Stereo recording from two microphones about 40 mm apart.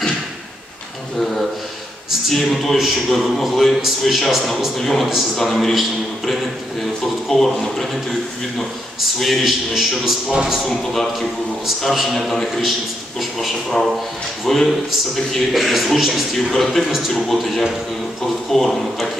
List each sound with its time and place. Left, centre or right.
2.3 s speech: centre
9.2 s a man's voice: centre
10.6 s speech: centre
14.4 s speech: centre